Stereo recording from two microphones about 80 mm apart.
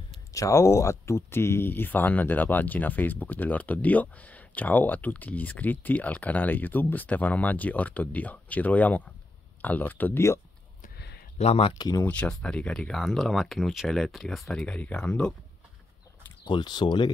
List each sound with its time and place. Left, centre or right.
0.3 s speech: left
12.1 s speech: centre
13.0 s speech: centre
14.5 s speech: centre
16.4 s speech: left